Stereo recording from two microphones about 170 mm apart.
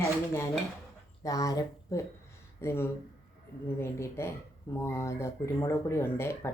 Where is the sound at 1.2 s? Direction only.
20° left (ahead or behind).